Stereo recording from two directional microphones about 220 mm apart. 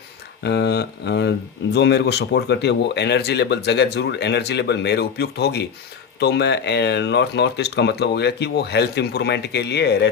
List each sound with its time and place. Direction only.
0.4 s speech: 50° left (ahead or behind)